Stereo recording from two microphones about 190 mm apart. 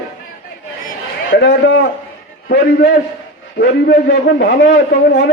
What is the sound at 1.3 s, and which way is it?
Speech, 65° left (ahead or behind).